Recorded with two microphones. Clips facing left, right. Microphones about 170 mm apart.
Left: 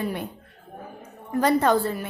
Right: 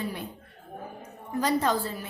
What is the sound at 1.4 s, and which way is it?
Speech, 60° left (ahead or behind).